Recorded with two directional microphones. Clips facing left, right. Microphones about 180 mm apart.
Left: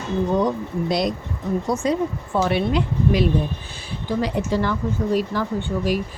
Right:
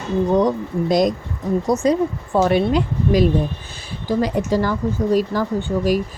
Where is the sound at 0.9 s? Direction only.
45° right (ahead or behind).